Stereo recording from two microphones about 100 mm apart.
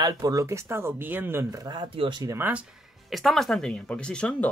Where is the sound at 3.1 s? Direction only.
Centre (ahead or behind).